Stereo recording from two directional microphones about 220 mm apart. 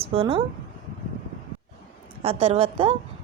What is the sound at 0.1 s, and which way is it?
Speech, 25° right (ahead or behind).